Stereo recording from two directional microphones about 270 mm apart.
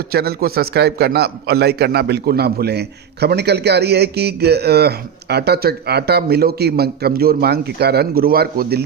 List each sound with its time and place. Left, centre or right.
0.1 s a man's voice: right